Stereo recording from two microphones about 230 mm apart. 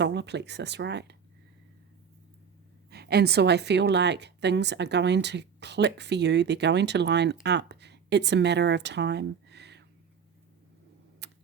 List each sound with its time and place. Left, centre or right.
0.0 s a woman's voice: right
2.9 s a woman's voice: right
11.2 s typing: right